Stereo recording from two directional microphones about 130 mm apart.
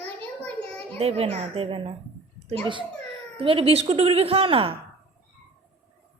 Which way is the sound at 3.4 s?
45° right (ahead or behind).